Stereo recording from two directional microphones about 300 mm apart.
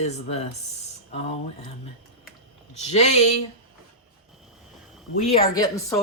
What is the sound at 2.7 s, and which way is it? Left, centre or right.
Speech, left.